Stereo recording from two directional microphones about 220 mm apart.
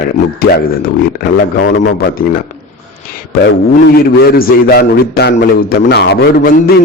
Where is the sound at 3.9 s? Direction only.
45° left (ahead or behind).